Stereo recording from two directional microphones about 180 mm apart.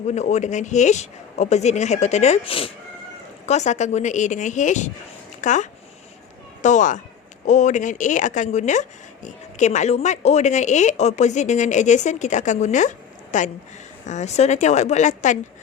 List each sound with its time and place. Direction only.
0.1 s speech: 40° left (ahead or behind)